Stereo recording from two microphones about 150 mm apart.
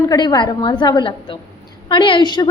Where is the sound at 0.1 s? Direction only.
25° left (ahead or behind).